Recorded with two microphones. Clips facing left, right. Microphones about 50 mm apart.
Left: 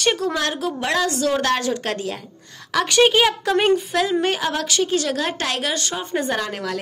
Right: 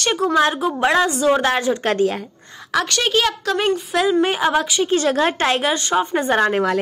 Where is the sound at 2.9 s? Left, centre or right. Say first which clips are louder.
Left 7 dB; centre.